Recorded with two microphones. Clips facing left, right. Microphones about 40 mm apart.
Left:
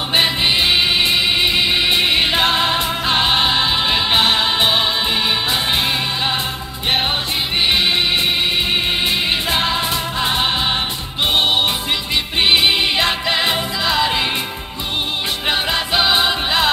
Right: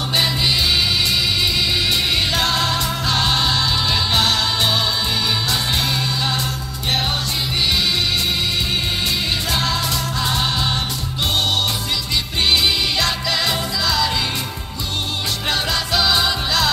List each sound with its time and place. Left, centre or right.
0.1 s music: left
9.5 s music: left
12.4 s music: left
15.4 s music: left